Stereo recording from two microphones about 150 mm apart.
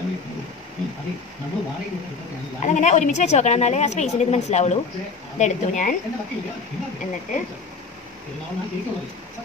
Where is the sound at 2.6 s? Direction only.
55° left (ahead or behind).